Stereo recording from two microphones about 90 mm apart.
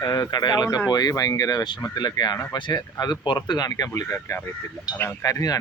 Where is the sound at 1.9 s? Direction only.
50° left (ahead or behind).